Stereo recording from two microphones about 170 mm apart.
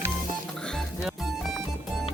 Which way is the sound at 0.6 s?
Centre (ahead or behind).